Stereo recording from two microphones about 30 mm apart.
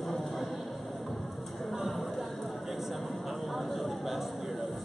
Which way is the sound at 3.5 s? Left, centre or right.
Centre.